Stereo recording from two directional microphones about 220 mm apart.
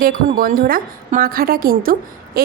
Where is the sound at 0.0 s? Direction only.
40° right (ahead or behind).